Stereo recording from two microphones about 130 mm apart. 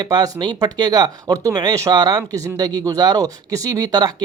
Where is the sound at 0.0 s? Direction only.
30° right (ahead or behind).